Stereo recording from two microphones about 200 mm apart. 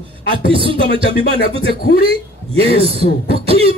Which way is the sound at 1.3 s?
50° left (ahead or behind).